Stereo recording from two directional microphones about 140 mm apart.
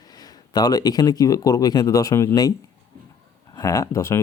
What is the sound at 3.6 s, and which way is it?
Speech, 25° left (ahead or behind).